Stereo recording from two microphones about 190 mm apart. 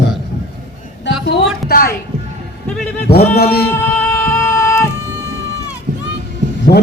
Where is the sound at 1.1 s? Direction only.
70° left (ahead or behind).